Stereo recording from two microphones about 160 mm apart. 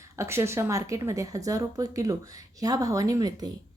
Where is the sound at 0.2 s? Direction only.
15° right (ahead or behind).